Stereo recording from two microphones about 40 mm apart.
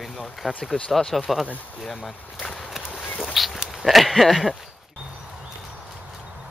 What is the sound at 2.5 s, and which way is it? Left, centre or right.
Horse, centre.